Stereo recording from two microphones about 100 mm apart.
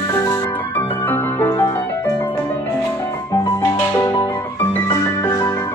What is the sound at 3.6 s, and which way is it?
Music, 30° left (ahead or behind).